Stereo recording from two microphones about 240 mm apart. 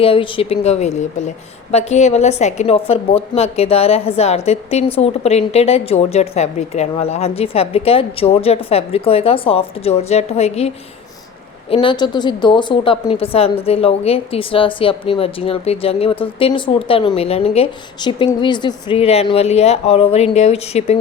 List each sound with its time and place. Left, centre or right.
0.0 s a woman's voice: left
11.7 s a woman's voice: left